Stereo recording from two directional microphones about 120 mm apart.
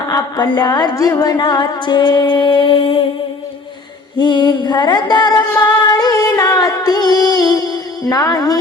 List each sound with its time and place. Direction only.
0.1 s music: 35° left (ahead or behind)
4.2 s a sound: 40° left (ahead or behind)
8.1 s music: 30° left (ahead or behind)